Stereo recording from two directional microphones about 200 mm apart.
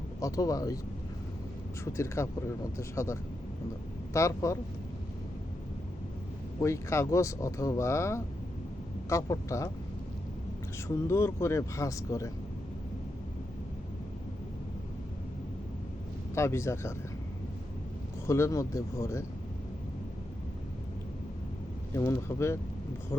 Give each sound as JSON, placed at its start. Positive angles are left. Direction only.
{"t": 0.2, "sound": "speech", "side_deg": 15}
{"t": 1.8, "sound": "speech", "side_deg": 15}
{"t": 6.6, "sound": "speech", "side_deg": 15}
{"t": 10.8, "sound": "speech", "side_deg": 15}
{"t": 16.3, "sound": "speech", "side_deg": 15}
{"t": 18.3, "sound": "speech", "side_deg": 15}
{"t": 21.9, "sound": "speech", "side_deg": 15}